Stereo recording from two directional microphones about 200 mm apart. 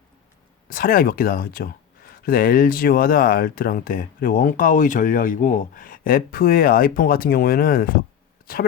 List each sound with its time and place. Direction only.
0.7 s speech: 45° left (ahead or behind)